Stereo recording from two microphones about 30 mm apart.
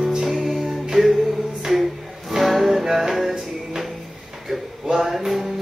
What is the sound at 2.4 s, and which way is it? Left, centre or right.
Music, centre.